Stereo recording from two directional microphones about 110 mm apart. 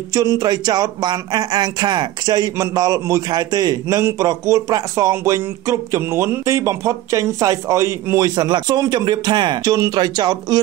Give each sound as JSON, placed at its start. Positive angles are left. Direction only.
{"t": 0.1, "sound": "speech", "side_deg": -30}
{"t": 8.4, "sound": "speech", "side_deg": -40}